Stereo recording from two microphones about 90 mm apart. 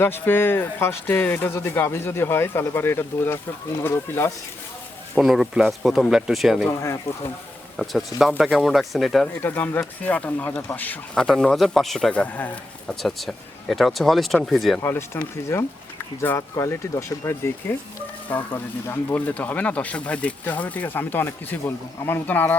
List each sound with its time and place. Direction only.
0.0 s speech: 25° left (ahead or behind)
5.1 s speech: 5° right (ahead or behind)
6.7 s speech: 35° left (ahead or behind)
7.8 s speech: centre (ahead or behind)
9.4 s speech: 20° left (ahead or behind)
11.1 s speech: 10° left (ahead or behind)
12.1 s speech: 15° left (ahead or behind)
12.9 s speech: 5° left (ahead or behind)
14.8 s speech: 30° left (ahead or behind)
16.2 s speech: 25° left (ahead or behind)
18.5 s speech: 20° left (ahead or behind)